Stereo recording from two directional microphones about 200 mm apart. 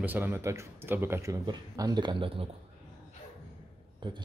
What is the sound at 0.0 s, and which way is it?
Speech, 10° right (ahead or behind).